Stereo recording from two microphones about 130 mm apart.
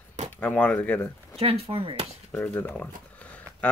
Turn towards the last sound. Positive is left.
turn(degrees=10)  # may be behind; listen again after turning